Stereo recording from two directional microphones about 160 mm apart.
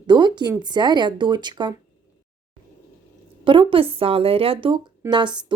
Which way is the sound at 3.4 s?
35° right (ahead or behind).